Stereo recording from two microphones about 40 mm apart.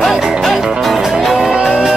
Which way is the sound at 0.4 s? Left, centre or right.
Centre.